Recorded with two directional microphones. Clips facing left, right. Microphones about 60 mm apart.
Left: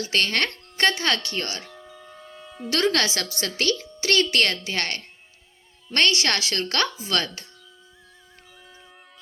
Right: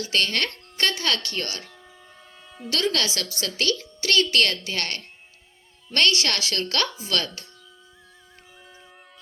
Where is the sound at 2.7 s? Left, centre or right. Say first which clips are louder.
Left 3 dB; left.